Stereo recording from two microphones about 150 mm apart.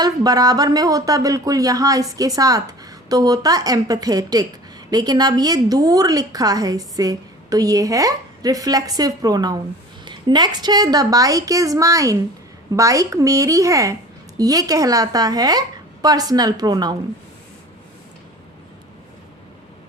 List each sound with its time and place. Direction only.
0.0 s a woman's voice: 25° right (ahead or behind)